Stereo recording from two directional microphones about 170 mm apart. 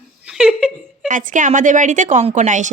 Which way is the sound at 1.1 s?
50° right (ahead or behind).